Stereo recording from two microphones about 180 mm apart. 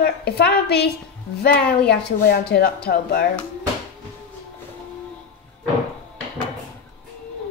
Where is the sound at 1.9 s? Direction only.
60° left (ahead or behind).